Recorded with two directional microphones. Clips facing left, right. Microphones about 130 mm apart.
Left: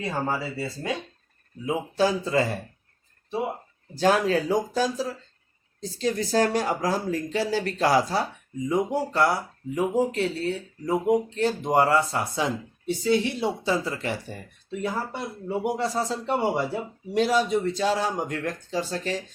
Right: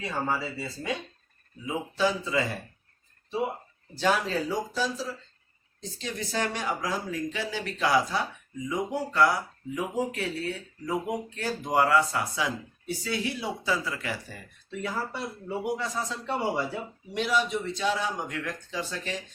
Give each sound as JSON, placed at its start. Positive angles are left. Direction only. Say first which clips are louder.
{"t": 0.3, "sound": "speech", "louder": "left 2 dB", "side_deg": 45}
{"t": 2.0, "sound": "speech", "louder": "left 4 dB", "side_deg": 40}
{"t": 3.9, "sound": "speech", "louder": "left 5 dB", "side_deg": 45}